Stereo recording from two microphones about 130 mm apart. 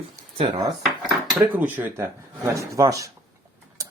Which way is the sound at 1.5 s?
15° right (ahead or behind).